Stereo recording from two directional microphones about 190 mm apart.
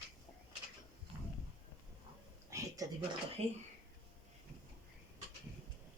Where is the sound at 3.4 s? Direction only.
30° right (ahead or behind).